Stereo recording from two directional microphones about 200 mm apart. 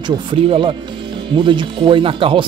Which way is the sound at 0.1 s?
25° right (ahead or behind).